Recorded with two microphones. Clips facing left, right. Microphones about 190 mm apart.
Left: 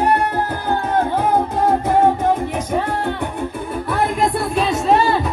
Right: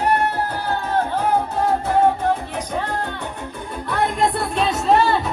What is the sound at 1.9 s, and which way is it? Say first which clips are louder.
Music: left 1 dB; 15° left (ahead or behind).